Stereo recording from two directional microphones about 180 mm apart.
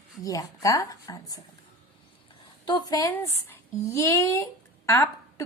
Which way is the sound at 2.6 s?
25° left (ahead or behind).